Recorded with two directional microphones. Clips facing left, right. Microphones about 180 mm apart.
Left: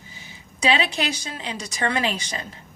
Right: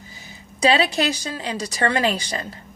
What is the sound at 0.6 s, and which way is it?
A woman's voice, 40° right (ahead or behind).